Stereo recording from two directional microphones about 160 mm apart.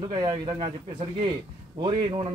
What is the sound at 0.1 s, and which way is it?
Speech, 25° right (ahead or behind).